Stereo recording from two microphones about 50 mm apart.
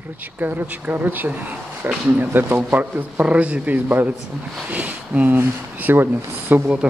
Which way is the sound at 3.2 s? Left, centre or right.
Right.